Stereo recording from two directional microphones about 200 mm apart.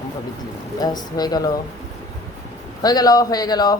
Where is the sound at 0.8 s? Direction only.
20° left (ahead or behind).